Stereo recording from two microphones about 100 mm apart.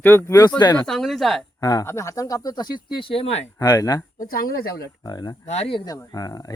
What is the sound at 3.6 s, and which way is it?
Speech, 35° left (ahead or behind).